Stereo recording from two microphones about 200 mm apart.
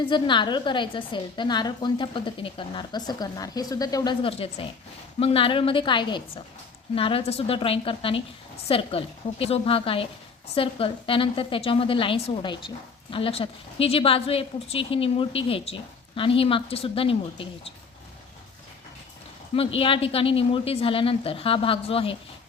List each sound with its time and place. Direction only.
0.0 s a woman's voice: 25° left (ahead or behind)
19.5 s a woman's voice: 25° left (ahead or behind)